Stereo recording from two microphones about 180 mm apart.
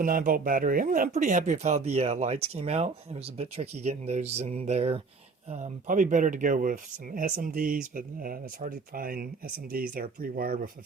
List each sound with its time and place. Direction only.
0.0 s speech: 50° right (ahead or behind)